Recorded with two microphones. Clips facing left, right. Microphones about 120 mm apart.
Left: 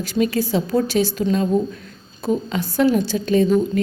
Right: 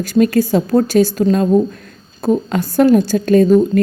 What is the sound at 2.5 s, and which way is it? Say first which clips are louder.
Speech: right 7 dB; 45° right (ahead or behind).